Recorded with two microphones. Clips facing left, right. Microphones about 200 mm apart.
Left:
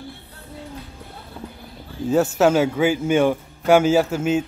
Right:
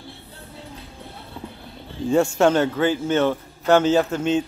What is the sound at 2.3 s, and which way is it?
Speech, 5° left (ahead or behind).